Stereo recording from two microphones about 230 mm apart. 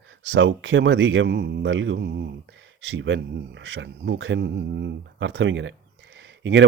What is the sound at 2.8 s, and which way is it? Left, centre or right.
Speech, right.